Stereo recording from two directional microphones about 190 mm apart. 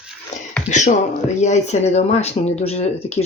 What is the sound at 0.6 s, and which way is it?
Speech, 40° left (ahead or behind).